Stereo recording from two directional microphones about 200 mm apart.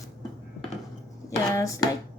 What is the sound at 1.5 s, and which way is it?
Speech, 15° left (ahead or behind).